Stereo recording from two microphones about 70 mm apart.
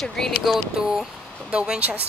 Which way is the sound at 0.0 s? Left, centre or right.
Centre.